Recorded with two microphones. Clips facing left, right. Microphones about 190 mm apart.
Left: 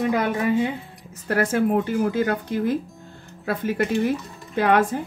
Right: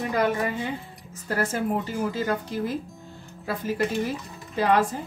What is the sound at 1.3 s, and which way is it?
A woman's voice, 65° left (ahead or behind).